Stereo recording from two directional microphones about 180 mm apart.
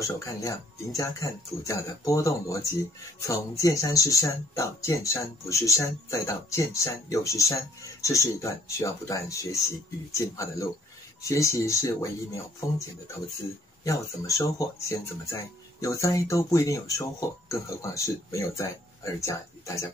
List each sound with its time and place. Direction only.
0.0 s speech: 20° left (ahead or behind)
13.8 s speech: 20° left (ahead or behind)